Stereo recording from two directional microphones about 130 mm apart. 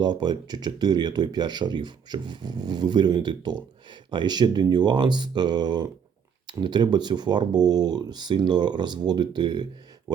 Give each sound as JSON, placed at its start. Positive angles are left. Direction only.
{"t": 0.0, "sound": "speech", "side_deg": -35}